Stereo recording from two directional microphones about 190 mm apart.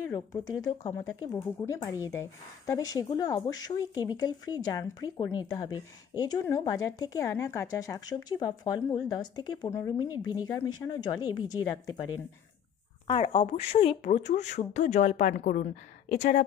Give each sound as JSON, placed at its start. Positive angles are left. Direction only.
{"t": 0.1, "sound": "speech", "side_deg": 20}
{"t": 13.0, "sound": "a woman's voice", "side_deg": 25}